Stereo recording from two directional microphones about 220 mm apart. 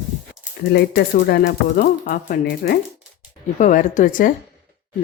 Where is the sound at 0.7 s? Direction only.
45° left (ahead or behind).